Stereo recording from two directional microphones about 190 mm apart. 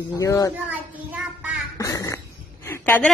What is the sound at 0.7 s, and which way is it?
Speech, 5° right (ahead or behind).